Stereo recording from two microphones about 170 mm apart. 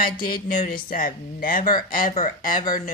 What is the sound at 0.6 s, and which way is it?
Speech, 55° left (ahead or behind).